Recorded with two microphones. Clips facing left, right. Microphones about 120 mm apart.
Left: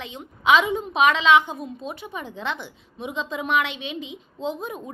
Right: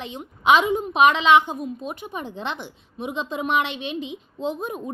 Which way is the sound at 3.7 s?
60° right (ahead or behind).